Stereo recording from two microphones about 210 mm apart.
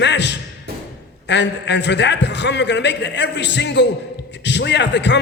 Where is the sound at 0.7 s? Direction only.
50° right (ahead or behind).